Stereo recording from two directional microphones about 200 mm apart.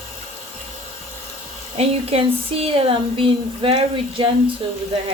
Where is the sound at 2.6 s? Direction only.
25° right (ahead or behind).